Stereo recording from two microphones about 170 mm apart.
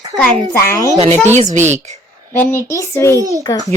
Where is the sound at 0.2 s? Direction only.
15° left (ahead or behind).